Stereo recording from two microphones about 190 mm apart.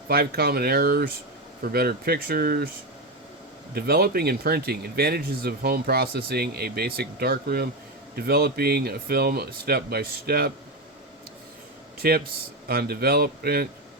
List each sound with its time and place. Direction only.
0.1 s speech: 55° right (ahead or behind)
3.8 s speech: 55° right (ahead or behind)
11.9 s a man's voice: 55° right (ahead or behind)